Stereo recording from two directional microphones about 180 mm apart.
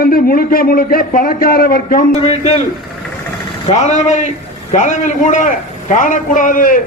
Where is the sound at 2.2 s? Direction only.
35° left (ahead or behind).